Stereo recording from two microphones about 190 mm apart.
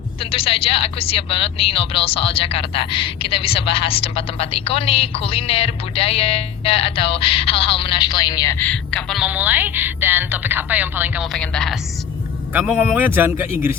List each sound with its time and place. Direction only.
0.2 s a woman's voice: 30° left (ahead or behind); by 13.0 s centre (ahead or behind)
13.0 s speech: 10° right (ahead or behind)